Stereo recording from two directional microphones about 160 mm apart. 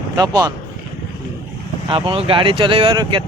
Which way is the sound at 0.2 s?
20° right (ahead or behind).